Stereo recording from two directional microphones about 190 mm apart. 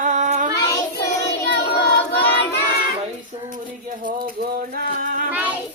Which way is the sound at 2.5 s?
55° left (ahead or behind).